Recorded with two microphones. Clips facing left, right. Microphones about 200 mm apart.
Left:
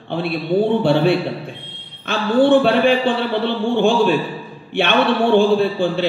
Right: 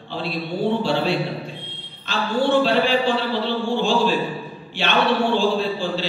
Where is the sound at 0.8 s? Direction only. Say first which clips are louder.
Left 6 dB; 60° left (ahead or behind).